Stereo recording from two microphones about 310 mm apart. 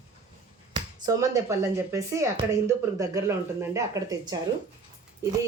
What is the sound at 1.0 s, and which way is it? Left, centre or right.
Speech, centre.